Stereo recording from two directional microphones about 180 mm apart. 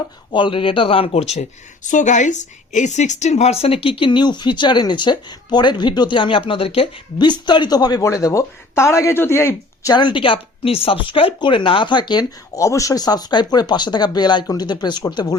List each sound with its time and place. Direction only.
0.3 s speech: 25° left (ahead or behind)